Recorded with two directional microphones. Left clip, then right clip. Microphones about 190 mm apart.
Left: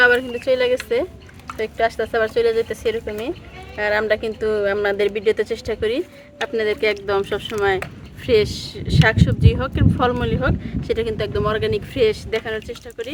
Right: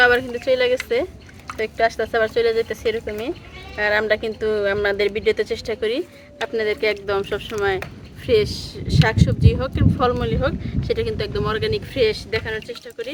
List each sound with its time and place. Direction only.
0.0 s speech: 10° left (ahead or behind); by 7.6 s 25° left (ahead or behind)
8.3 s speech: 35° left (ahead or behind); by 12.4 s 60° left (ahead or behind)
12.4 s speech: 40° left (ahead or behind)